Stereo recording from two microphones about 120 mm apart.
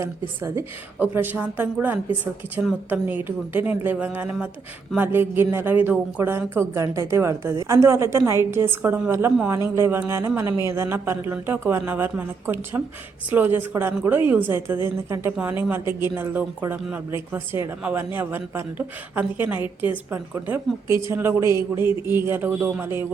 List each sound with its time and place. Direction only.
0.0 s a woman's voice: 25° right (ahead or behind)